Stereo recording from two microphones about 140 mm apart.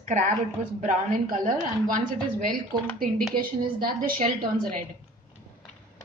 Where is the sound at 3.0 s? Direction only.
90° right.